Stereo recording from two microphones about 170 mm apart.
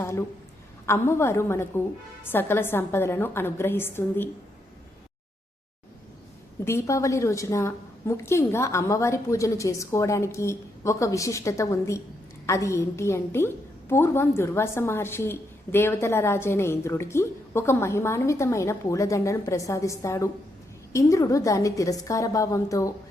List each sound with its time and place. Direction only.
0.0 s a woman's voice: 15° left (ahead or behind)
6.7 s a woman's voice: 15° left (ahead or behind)